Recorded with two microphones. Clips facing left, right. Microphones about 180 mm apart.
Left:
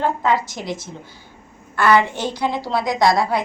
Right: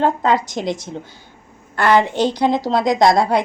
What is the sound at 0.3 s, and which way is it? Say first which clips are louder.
A woman's voice: right 3 dB; 20° right (ahead or behind).